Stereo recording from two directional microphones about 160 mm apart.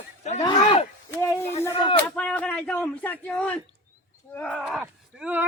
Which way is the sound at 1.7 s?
35° left (ahead or behind).